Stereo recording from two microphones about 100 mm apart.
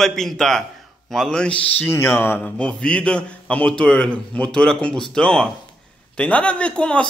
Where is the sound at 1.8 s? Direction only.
25° left (ahead or behind).